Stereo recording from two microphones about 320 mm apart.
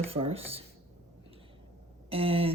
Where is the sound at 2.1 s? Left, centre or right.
Centre.